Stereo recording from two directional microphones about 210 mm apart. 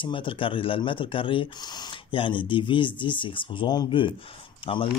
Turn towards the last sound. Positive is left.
turn(degrees=25)  # may be behind; listen again after turning